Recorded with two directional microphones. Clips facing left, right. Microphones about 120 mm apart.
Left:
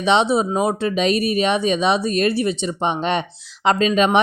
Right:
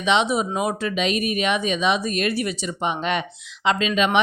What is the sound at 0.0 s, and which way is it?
Speech, 35° left (ahead or behind).